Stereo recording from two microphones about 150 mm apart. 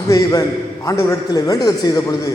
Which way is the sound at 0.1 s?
25° left (ahead or behind).